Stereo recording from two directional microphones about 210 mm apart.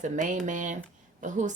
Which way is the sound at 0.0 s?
35° right (ahead or behind).